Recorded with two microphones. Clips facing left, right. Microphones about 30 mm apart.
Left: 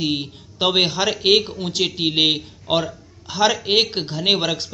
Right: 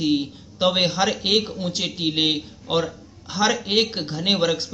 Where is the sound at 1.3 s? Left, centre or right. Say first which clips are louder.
Left 4 dB; left.